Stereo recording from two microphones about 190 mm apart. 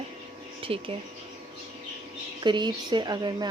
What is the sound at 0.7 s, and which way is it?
Speech, 30° right (ahead or behind).